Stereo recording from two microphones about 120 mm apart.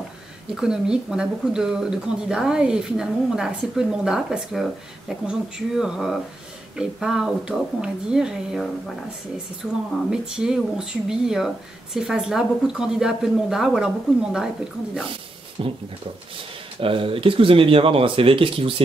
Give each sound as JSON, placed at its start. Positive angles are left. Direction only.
{"t": 0.6, "sound": "speech", "side_deg": -5}
{"t": 15.6, "sound": "speech", "side_deg": -50}
{"t": 16.8, "sound": "speech", "side_deg": -50}